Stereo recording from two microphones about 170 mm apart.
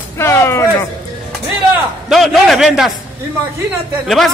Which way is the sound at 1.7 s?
Centre (ahead or behind).